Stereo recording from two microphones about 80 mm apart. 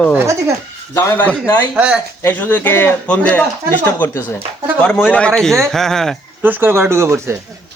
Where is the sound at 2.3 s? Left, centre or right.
Left.